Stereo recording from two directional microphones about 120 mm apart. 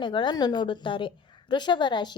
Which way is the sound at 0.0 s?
40° left (ahead or behind).